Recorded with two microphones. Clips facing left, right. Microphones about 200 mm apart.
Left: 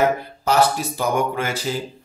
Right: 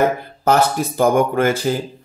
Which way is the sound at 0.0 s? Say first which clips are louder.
Right 2 dB; 50° right (ahead or behind).